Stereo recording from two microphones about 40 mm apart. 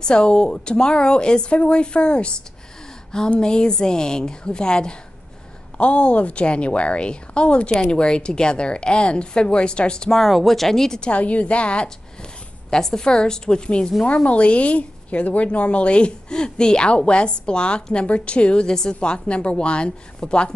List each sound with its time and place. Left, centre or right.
0.0 s a woman's voice: left
3.3 s a woman's voice: left
10.1 s speech: centre
11.0 s a woman's voice: left
14.0 s a woman's voice: left